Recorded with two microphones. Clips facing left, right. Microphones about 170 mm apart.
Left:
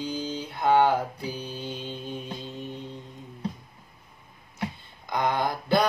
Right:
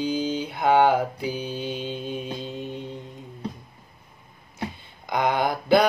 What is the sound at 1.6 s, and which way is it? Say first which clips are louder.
Mantra: right 5 dB; 85° right.